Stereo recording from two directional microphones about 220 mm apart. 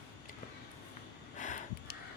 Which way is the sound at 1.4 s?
35° left (ahead or behind).